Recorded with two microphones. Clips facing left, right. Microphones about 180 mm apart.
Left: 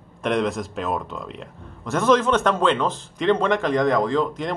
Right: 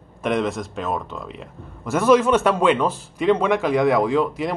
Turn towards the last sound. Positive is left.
turn(degrees=-10)  # may be behind; listen again after turning